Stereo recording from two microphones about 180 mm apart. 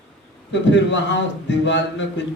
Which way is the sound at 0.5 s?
85° left.